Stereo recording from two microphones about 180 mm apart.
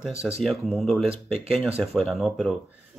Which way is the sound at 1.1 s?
35° right (ahead or behind).